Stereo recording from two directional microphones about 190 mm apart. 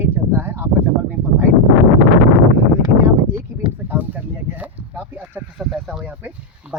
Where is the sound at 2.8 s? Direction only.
20° right (ahead or behind).